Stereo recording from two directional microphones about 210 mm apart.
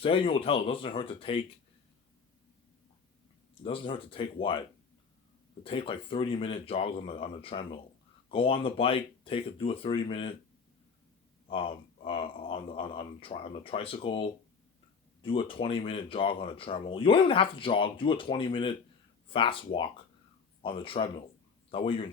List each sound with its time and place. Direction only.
0.0 s speech: 25° left (ahead or behind)
3.6 s speech: 25° left (ahead or behind)
5.6 s speech: 25° left (ahead or behind)
11.4 s speech: 25° left (ahead or behind)